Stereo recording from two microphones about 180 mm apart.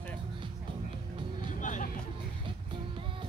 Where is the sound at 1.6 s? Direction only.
45° left (ahead or behind).